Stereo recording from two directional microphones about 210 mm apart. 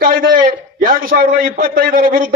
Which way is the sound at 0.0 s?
45° right (ahead or behind).